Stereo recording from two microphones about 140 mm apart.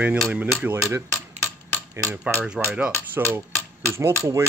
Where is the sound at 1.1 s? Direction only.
15° left (ahead or behind).